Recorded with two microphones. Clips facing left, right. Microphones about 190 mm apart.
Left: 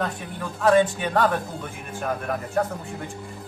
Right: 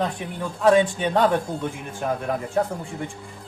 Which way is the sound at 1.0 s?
20° right (ahead or behind).